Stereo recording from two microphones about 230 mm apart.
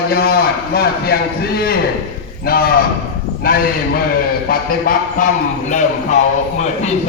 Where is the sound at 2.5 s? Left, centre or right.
Left.